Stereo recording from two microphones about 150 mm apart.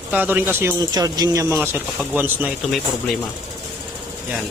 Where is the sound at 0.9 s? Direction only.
25° right (ahead or behind).